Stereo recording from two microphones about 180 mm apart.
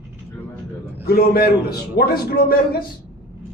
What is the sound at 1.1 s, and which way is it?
Speech, 55° left (ahead or behind).